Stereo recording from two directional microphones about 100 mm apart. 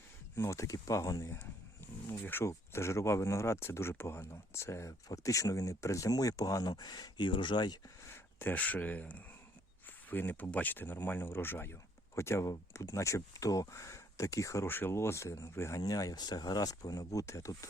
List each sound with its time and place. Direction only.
0.3 s speech: 30° left (ahead or behind); by 7.8 s 50° left (ahead or behind)
8.1 s speech: 20° left (ahead or behind)